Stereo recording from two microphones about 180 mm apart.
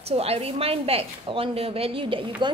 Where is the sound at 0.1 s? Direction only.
35° right (ahead or behind).